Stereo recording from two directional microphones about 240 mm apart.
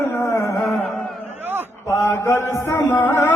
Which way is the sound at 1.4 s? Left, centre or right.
Centre.